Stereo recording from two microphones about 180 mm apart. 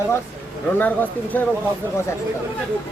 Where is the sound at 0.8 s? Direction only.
10° left (ahead or behind).